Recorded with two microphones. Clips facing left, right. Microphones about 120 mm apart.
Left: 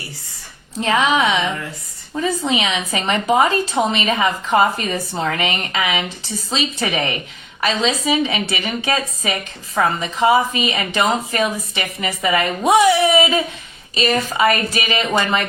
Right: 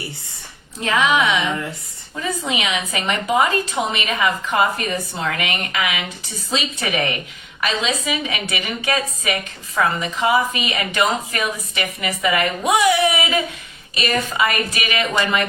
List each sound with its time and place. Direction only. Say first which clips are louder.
0.9 s a woman's voice: left 1 dB; 30° left (ahead or behind)